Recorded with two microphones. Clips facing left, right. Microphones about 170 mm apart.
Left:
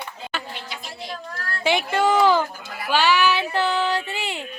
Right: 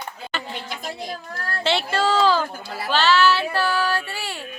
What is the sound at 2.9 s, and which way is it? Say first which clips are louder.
Child singing: right 1 dB; 15° left (ahead or behind).